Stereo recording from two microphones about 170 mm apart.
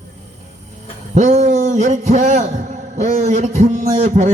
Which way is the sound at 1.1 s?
45° right (ahead or behind).